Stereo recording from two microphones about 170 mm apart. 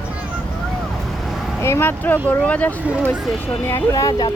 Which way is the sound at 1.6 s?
15° left (ahead or behind).